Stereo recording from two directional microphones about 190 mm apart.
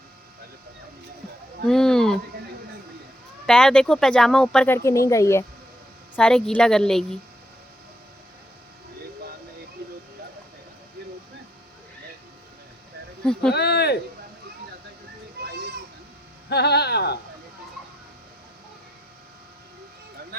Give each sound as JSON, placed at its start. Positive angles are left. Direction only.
{"t": 1.6, "sound": "a sound", "side_deg": 5}
{"t": 3.4, "sound": "speech", "side_deg": 5}
{"t": 6.1, "sound": "speech", "side_deg": 5}
{"t": 13.5, "sound": "speech", "side_deg": 60}
{"t": 15.4, "sound": "children playing", "side_deg": -55}
{"t": 16.5, "sound": "speech", "side_deg": 60}